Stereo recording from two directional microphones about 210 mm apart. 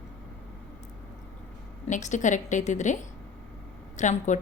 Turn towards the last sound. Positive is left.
turn(degrees=35)  # may be behind; listen again after turning